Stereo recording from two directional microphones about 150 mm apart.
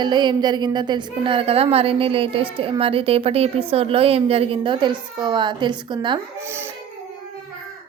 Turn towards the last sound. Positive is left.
turn(degrees=-15)  # may be behind; listen again after turning